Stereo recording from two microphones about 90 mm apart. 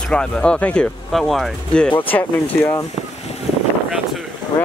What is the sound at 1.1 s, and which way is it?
Speech, centre (ahead or behind).